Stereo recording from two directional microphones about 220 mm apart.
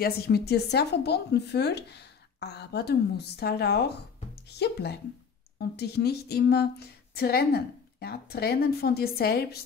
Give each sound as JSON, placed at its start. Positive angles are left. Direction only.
{"t": 0.0, "sound": "speech", "side_deg": 45}